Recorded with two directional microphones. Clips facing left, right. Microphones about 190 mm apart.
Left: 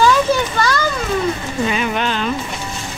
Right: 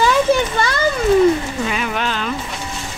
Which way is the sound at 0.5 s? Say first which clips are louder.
Left 1 dB; 25° right (ahead or behind).